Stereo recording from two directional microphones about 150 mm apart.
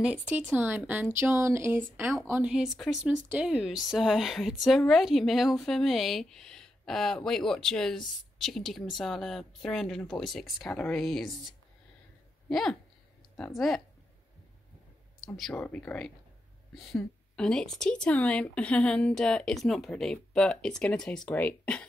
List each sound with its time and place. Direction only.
0.0 s speech: 10° right (ahead or behind)
15.3 s speech: 5° left (ahead or behind)